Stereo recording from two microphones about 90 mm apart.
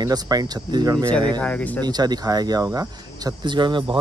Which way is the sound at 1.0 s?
10° left (ahead or behind).